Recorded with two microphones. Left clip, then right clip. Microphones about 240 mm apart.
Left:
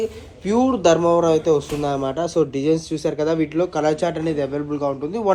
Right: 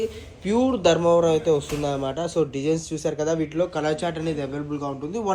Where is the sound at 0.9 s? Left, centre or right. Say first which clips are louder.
Left 2 dB; left.